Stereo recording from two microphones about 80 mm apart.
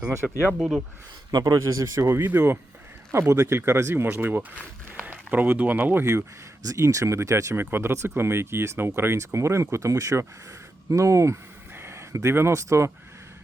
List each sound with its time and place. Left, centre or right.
0.2 s speech: centre
1.3 s speech: right
6.7 s speech: right
7.6 s speech: right